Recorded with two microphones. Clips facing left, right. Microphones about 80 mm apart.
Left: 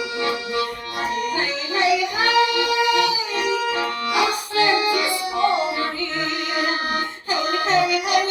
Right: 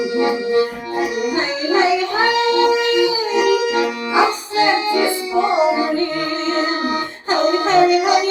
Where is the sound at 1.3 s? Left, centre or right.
Right.